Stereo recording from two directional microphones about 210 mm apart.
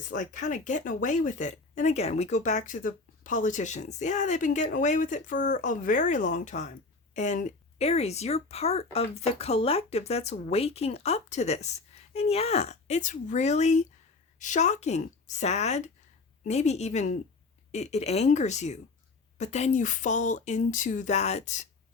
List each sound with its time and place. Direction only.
0.1 s speech: 35° left (ahead or behind)